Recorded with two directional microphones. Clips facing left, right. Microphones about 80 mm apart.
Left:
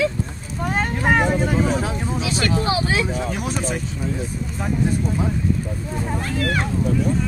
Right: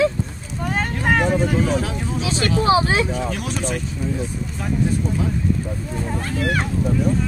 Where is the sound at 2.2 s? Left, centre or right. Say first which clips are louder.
Right 4 dB; right.